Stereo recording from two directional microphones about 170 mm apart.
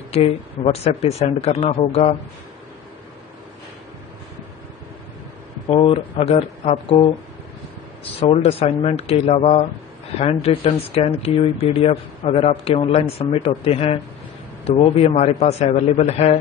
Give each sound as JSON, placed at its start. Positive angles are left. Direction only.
{"t": 0.7, "sound": "speech", "side_deg": 40}
{"t": 5.7, "sound": "speech", "side_deg": 35}
{"t": 8.2, "sound": "speech", "side_deg": 35}